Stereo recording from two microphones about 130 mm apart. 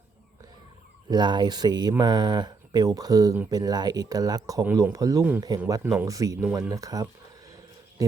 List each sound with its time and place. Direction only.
1.1 s speech: 35° right (ahead or behind)
5.8 s speech: 15° right (ahead or behind)
6.1 s speech: 25° right (ahead or behind)
6.5 s a sound: 25° right (ahead or behind)